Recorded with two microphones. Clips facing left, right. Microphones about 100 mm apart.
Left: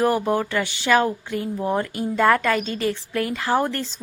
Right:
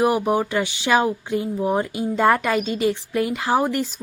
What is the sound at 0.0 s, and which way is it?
Speech, 15° right (ahead or behind).